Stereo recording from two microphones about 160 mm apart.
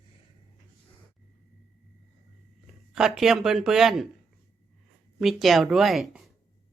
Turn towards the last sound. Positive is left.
turn(degrees=0)  # may be behind; listen again after turning